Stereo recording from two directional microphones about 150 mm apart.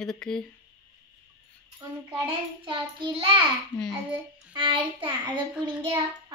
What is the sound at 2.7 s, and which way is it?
A child's voice, 35° right (ahead or behind).